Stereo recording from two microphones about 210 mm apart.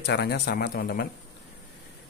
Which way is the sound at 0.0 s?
50° left (ahead or behind).